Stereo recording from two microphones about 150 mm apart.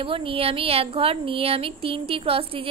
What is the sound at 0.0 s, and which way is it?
Speech, 35° right (ahead or behind).